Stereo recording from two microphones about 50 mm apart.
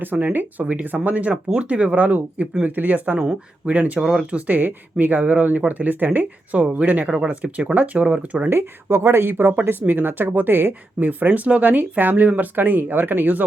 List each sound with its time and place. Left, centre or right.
0.0 s speech: right
8.4 s speech: right